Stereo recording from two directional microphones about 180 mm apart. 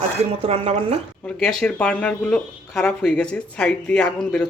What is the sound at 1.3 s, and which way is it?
Speech, 5° left (ahead or behind).